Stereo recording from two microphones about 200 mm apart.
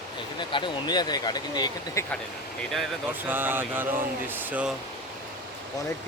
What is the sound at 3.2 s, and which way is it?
Speech, 10° right (ahead or behind).